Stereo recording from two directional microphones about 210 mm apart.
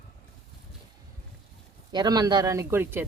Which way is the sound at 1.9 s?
20° right (ahead or behind).